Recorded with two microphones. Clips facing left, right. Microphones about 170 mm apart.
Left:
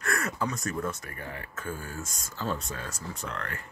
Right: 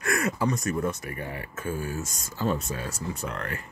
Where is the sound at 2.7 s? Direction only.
20° right (ahead or behind).